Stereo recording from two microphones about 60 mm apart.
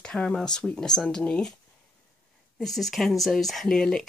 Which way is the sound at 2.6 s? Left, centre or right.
Centre.